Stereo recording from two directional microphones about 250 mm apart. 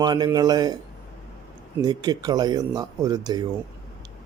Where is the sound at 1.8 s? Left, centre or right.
Centre.